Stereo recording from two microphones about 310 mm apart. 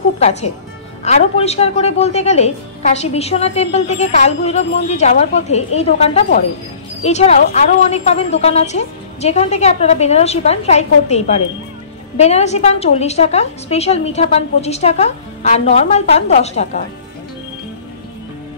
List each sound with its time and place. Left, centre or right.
0.2 s a woman's voice: left